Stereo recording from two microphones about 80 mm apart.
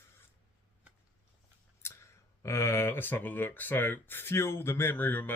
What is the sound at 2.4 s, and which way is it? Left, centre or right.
Speech, left.